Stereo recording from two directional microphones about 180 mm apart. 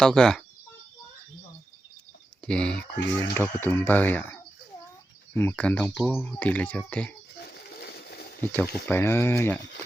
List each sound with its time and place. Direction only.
0.0 s speech: 5° left (ahead or behind)
2.5 s speech: 5° left (ahead or behind)
6.4 s speech: 10° left (ahead or behind)
7.3 s a sound: 60° left (ahead or behind)
8.4 s speech: 10° left (ahead or behind)